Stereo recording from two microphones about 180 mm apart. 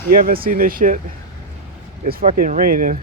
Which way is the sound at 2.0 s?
50° right (ahead or behind).